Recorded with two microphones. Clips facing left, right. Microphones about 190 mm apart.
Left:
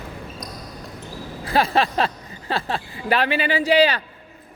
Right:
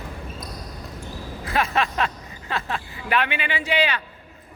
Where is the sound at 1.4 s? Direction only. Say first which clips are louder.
Left 4 dB; 35° left (ahead or behind).